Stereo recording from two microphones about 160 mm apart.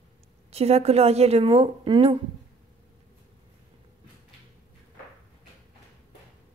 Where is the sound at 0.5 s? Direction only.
40° right (ahead or behind).